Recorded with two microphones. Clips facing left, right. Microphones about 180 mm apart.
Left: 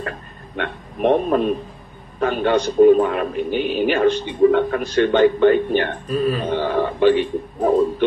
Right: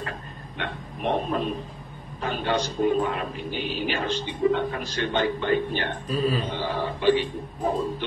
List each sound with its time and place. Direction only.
0.6 s a man's voice: 55° left (ahead or behind)